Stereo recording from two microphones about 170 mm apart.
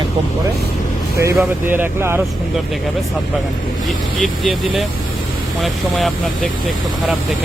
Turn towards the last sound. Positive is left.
turn(degrees=0)  # may be behind; listen again after turning